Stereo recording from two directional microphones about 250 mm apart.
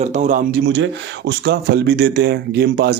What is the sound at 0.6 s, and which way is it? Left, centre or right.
Speech, right.